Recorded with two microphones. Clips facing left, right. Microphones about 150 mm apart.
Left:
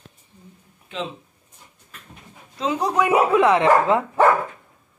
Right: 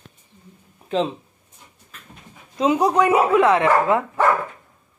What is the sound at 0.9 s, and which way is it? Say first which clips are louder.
Speech: right 9 dB; 35° right (ahead or behind).